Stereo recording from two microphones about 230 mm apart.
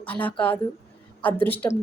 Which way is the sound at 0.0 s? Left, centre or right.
Centre.